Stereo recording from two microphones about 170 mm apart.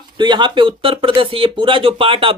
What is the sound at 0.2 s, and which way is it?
Speech, 25° right (ahead or behind).